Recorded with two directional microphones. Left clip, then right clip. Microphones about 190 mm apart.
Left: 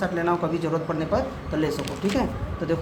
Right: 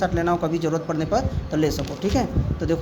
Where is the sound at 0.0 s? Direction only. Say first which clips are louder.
Right 2 dB; 50° right (ahead or behind).